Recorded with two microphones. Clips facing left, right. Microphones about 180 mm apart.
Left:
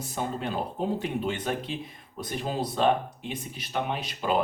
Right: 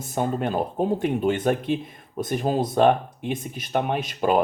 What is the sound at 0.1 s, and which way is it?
Speech, 50° right (ahead or behind).